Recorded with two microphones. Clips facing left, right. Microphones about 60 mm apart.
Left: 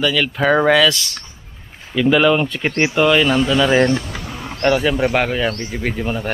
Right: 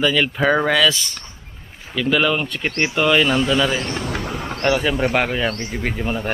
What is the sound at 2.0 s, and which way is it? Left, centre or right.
Speech, centre.